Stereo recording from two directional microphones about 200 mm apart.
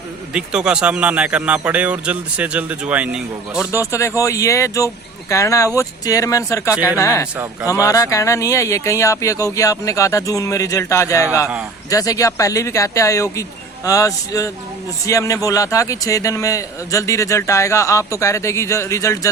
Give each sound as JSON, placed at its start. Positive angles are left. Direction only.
{"t": 0.3, "sound": "speech", "side_deg": -5}
{"t": 3.7, "sound": "a man's voice", "side_deg": 15}